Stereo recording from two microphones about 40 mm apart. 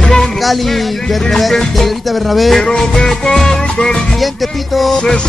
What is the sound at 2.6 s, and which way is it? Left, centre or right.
Music, centre.